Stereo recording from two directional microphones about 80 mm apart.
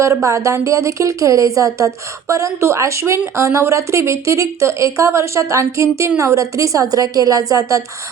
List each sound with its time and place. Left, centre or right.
0.0 s a woman's voice: right